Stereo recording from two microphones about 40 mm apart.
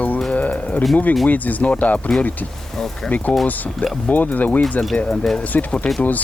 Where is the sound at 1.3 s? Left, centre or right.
Left.